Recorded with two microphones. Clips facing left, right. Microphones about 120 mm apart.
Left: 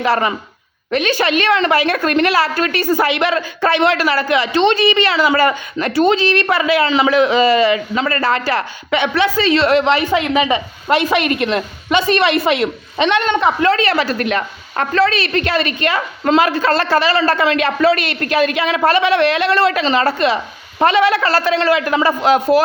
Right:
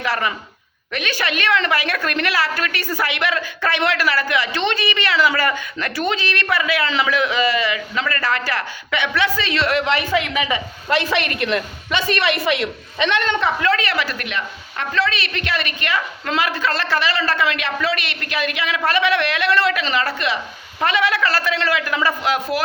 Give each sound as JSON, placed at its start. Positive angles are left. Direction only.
{"t": 0.0, "sound": "a woman's voice", "side_deg": 30}
{"t": 13.6, "sound": "a woman's voice", "side_deg": 30}